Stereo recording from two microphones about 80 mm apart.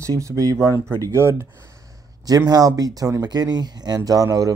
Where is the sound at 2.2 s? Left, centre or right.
Right.